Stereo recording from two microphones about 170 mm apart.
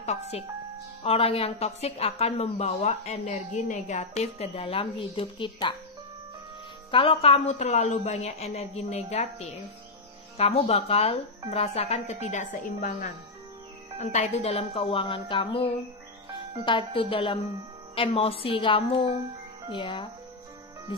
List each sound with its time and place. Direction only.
0.3 s a woman's voice: 35° left (ahead or behind)
6.9 s a woman's voice: 35° left (ahead or behind)